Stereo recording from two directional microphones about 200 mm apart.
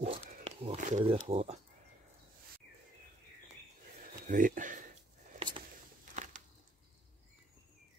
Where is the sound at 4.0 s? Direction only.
40° right (ahead or behind).